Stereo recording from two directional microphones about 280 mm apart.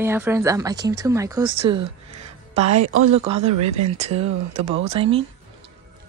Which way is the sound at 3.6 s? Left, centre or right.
Right.